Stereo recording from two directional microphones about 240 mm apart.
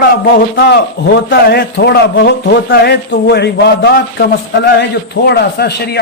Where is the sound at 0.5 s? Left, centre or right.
Left.